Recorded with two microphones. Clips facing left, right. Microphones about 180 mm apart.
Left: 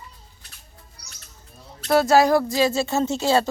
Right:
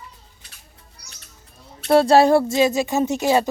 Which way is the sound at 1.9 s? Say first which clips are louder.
Right 3 dB; 30° right (ahead or behind).